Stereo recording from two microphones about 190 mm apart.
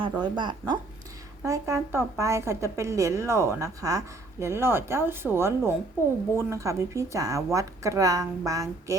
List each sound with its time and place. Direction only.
0.0 s a woman's voice: 25° right (ahead or behind)